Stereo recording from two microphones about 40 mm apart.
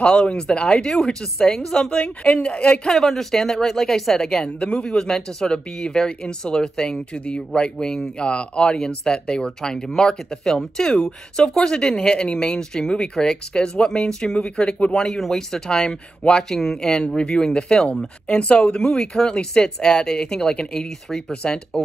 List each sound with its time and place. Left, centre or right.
0.0 s speech: left
2.9 s speech: centre
4.3 s speech: left
7.2 s speech: left
15.1 s speech: centre
16.5 s speech: centre
17.2 s speech: left